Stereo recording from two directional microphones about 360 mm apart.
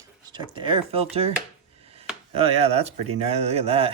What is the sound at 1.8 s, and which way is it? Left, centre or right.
Chopping, centre.